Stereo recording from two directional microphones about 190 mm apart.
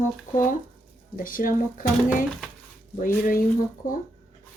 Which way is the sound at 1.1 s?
45° left (ahead or behind).